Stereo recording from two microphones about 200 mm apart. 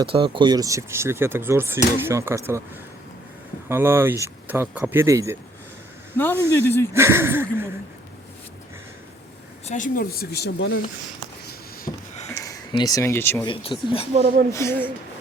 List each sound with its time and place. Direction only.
0.1 s speech: 25° right (ahead or behind)
3.7 s speech: 10° right (ahead or behind)
6.1 s a man's voice: 10° left (ahead or behind)
6.9 s speech: 15° right (ahead or behind)
9.6 s speech: 40° left (ahead or behind)
11.9 s a sound: 30° left (ahead or behind)
12.3 s speech: 15° left (ahead or behind)
13.5 s speech: 25° left (ahead or behind)
14.5 s a man's voice: 15° left (ahead or behind)